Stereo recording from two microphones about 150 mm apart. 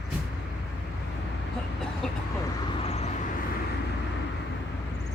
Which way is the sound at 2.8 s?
45° left (ahead or behind).